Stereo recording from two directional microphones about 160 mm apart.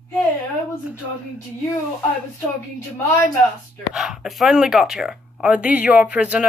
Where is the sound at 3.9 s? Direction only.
Centre (ahead or behind).